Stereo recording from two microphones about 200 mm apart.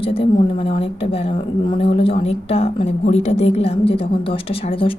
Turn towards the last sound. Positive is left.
turn(degrees=25)  # may be behind; listen again after turning